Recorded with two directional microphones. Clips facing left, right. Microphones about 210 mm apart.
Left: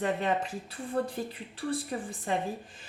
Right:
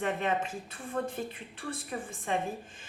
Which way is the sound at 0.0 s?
35° left (ahead or behind).